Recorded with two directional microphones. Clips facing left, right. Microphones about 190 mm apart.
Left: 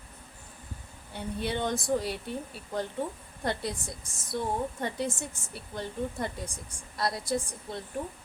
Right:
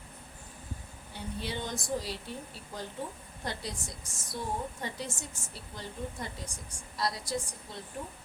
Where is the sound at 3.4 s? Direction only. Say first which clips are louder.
Left 6 dB; 60° left (ahead or behind).